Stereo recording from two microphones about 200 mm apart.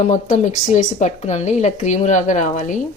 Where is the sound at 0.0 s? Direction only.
35° left (ahead or behind).